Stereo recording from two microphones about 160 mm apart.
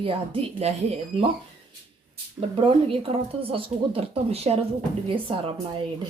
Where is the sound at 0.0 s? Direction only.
35° right (ahead or behind).